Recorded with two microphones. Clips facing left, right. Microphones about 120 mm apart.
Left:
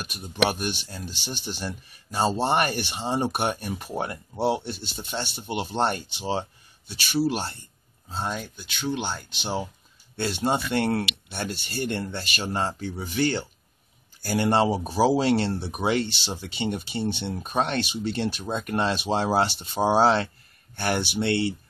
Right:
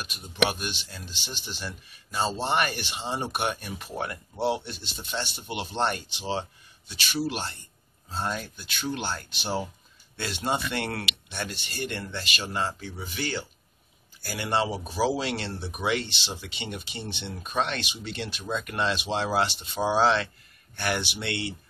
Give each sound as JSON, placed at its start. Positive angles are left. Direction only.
{"t": 0.0, "sound": "speech", "side_deg": 45}
{"t": 1.3, "sound": "speech", "side_deg": 55}
{"t": 2.0, "sound": "speech", "side_deg": 40}
{"t": 4.4, "sound": "speech", "side_deg": 20}
{"t": 8.2, "sound": "speech", "side_deg": 0}
{"t": 10.1, "sound": "speech", "side_deg": 30}